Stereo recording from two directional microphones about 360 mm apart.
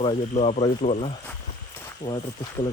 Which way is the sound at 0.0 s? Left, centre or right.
Centre.